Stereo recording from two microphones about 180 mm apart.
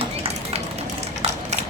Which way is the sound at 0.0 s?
30° right (ahead or behind).